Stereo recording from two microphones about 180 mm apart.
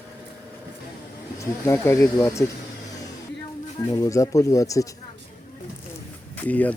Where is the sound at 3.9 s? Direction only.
20° left (ahead or behind).